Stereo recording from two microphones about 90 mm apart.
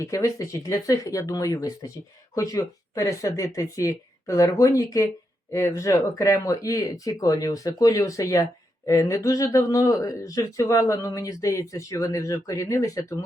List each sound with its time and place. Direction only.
0.0 s speech: 40° left (ahead or behind)